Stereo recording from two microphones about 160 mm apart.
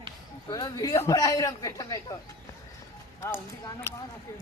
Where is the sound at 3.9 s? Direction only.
15° left (ahead or behind).